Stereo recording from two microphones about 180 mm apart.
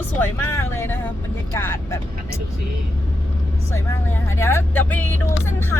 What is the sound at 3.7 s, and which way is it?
Speech, 15° left (ahead or behind).